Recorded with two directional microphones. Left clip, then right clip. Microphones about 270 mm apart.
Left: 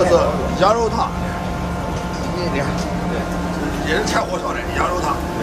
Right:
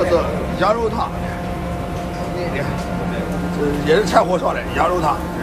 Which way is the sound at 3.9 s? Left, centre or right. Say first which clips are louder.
Right 5 dB; centre.